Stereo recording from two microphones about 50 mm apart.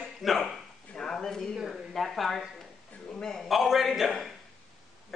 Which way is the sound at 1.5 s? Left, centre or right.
Centre.